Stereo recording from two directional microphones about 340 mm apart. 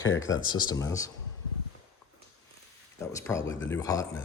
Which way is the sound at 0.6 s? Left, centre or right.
Centre.